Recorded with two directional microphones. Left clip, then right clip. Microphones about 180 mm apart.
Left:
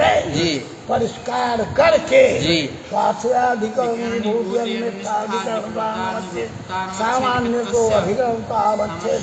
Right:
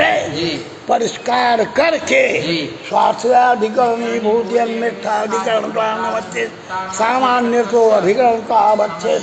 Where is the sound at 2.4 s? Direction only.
55° left (ahead or behind).